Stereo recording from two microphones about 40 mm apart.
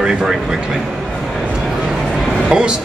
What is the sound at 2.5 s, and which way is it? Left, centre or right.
Speech, right.